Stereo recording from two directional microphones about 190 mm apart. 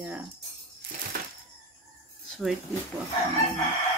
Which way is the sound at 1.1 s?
50° right (ahead or behind).